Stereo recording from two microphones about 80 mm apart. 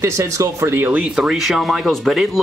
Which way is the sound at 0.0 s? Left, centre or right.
Right.